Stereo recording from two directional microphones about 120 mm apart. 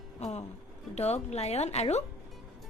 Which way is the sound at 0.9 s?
65° left (ahead or behind).